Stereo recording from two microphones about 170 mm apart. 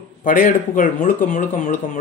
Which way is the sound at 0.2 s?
55° left (ahead or behind).